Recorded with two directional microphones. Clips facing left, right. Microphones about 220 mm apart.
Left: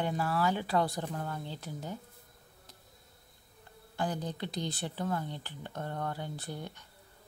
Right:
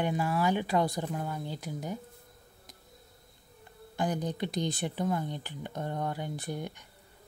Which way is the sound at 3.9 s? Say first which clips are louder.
Right 4 dB; 15° right (ahead or behind).